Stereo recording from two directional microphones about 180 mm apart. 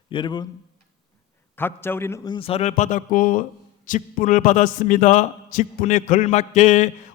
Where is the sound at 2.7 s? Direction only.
45° left (ahead or behind).